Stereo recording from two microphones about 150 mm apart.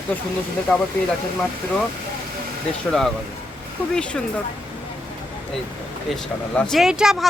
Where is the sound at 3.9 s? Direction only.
5° left (ahead or behind).